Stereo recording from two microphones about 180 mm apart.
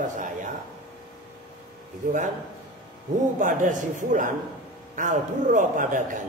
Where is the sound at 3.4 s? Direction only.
45° right (ahead or behind).